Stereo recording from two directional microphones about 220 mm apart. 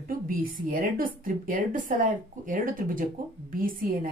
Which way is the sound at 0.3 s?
40° right (ahead or behind).